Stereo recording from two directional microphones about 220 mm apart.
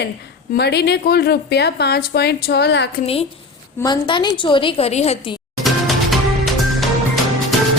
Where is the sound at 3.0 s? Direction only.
25° left (ahead or behind).